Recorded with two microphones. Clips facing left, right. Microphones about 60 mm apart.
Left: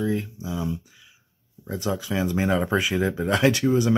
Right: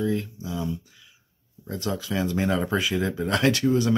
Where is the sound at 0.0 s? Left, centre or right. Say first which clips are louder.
Even; centre.